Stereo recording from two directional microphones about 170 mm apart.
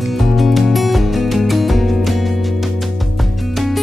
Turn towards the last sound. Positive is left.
turn(degrees=0)  # may be behind; listen again after turning